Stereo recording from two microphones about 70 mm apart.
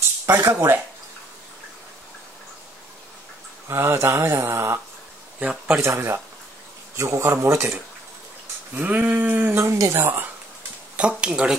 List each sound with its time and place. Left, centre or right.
0.3 s speech: right
3.6 s speech: right
5.4 s a man's voice: centre
5.8 s speech: right
7.0 s speech: right
7.4 s speech: right
8.7 s speech: right
11.0 s speech: centre